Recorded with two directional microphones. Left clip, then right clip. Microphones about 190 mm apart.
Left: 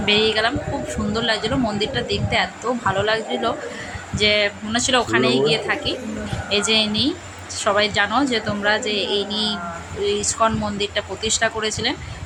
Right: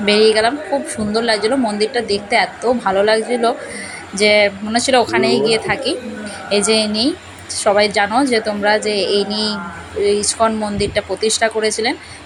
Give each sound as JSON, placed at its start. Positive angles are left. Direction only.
{"t": 0.0, "sound": "speech", "side_deg": -25}